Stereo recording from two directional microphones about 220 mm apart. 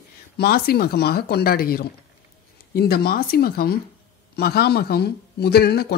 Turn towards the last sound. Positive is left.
turn(degrees=45)  # may be behind; listen again after turning